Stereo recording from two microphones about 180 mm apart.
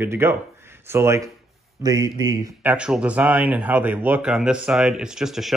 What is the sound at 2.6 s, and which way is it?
Speech, 5° right (ahead or behind).